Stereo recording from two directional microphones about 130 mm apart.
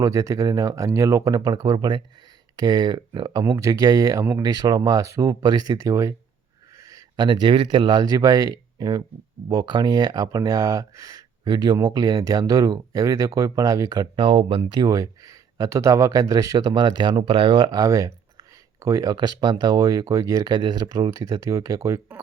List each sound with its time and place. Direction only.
0.0 s speech: 25° right (ahead or behind)